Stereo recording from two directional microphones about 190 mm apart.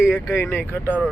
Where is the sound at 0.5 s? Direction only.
10° left (ahead or behind).